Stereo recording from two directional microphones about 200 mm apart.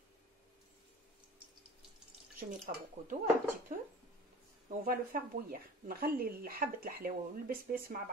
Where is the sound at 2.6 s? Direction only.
45° right (ahead or behind).